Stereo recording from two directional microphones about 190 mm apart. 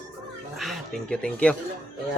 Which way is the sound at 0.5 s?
Centre (ahead or behind).